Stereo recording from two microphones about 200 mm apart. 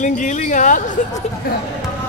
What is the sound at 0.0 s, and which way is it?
Speech, 40° left (ahead or behind).